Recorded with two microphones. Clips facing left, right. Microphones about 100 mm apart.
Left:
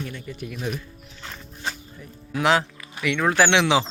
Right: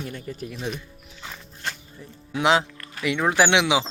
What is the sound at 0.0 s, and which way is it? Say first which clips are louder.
Speech: even; 40° right (ahead or behind).